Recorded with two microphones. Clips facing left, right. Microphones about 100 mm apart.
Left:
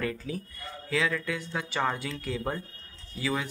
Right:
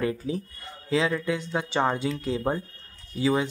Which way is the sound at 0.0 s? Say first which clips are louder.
Right 5 dB; 20° right (ahead or behind).